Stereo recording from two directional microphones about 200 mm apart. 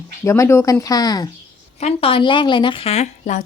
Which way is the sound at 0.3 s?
15° left (ahead or behind).